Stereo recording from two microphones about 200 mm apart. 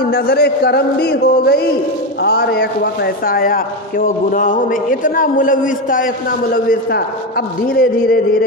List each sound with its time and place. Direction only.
0.0 s a man's voice: 50° left (ahead or behind)